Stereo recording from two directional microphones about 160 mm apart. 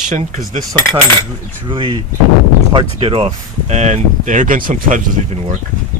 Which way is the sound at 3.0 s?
35° right (ahead or behind).